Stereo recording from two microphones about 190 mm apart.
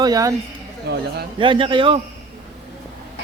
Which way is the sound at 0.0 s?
20° right (ahead or behind).